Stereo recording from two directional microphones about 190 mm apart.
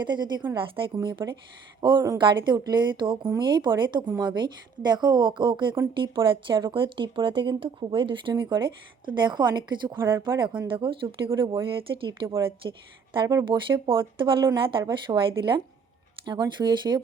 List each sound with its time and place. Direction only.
0.0 s speech: 25° right (ahead or behind)
10.0 s speech: 15° right (ahead or behind)
10.2 s speech: 25° right (ahead or behind)